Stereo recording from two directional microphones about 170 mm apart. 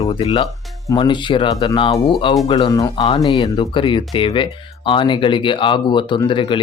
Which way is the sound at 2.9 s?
30° left (ahead or behind).